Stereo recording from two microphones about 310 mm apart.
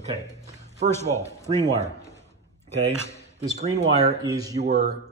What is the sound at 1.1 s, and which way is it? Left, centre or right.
Speech, centre.